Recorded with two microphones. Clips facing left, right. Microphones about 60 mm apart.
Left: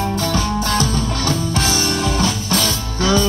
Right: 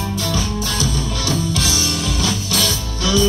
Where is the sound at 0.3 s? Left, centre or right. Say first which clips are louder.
Left 4 dB; left.